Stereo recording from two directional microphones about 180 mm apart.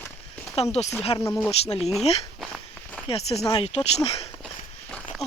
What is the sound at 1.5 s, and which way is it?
Speech, 35° left (ahead or behind).